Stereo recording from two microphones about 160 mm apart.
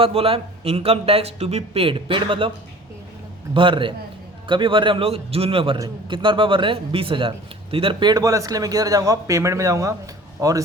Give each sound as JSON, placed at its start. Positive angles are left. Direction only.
{"t": 0.0, "sound": "speech", "side_deg": -35}
{"t": 3.5, "sound": "a man's voice", "side_deg": -30}